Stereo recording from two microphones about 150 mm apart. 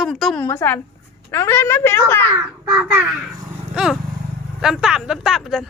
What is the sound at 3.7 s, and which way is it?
Vehicle, 5° right (ahead or behind).